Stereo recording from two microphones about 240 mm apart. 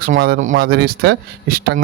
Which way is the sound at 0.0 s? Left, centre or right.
Right.